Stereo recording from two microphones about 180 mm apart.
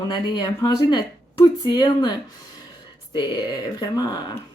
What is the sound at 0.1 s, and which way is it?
A woman's voice, 25° left (ahead or behind).